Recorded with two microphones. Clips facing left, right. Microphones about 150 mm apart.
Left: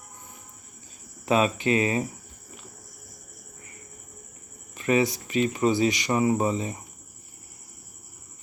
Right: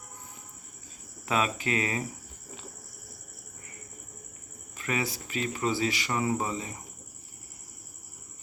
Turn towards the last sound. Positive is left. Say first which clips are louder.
# left 6 dB
turn(degrees=20)  # may be behind; listen again after turning